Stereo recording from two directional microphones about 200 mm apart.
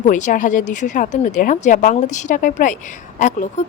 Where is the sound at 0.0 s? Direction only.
35° left (ahead or behind).